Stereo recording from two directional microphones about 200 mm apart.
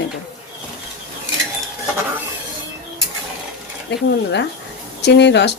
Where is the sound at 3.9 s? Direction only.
60° left (ahead or behind).